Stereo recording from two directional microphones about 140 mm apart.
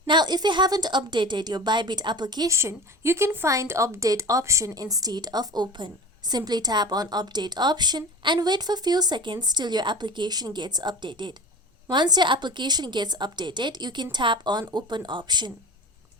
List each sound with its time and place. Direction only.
0.1 s a woman's voice: 30° right (ahead or behind)